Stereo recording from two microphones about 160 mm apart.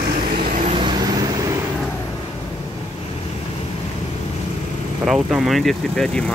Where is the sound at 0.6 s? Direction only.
45° right (ahead or behind).